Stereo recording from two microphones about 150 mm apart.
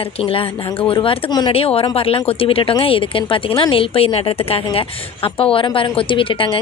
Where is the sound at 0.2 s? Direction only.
40° left (ahead or behind).